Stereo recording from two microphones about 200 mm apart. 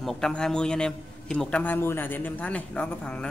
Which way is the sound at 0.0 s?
Centre (ahead or behind).